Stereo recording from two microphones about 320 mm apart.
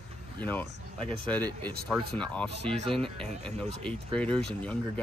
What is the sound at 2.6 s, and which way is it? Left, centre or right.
Speech, centre.